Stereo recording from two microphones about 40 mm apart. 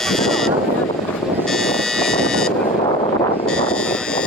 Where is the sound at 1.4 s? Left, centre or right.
Centre.